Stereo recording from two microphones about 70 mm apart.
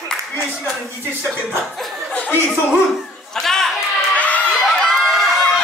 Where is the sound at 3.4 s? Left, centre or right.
Centre.